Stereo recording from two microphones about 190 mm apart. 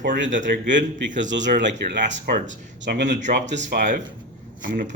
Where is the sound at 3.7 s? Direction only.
40° right (ahead or behind).